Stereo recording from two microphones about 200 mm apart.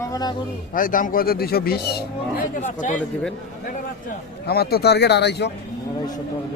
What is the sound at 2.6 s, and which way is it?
Speech, 35° left (ahead or behind).